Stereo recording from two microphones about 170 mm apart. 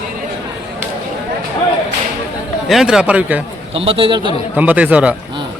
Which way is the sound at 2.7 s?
5° right (ahead or behind).